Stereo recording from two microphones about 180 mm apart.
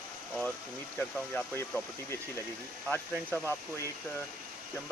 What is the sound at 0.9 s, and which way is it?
Speech, 10° left (ahead or behind).